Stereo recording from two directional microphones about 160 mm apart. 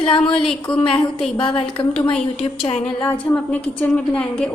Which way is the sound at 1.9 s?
5° left (ahead or behind).